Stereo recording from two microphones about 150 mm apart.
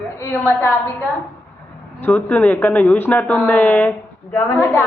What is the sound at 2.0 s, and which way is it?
Speech, 10° left (ahead or behind).